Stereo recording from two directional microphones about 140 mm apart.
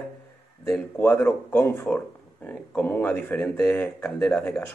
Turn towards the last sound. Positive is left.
turn(degrees=5)  # may be behind; listen again after turning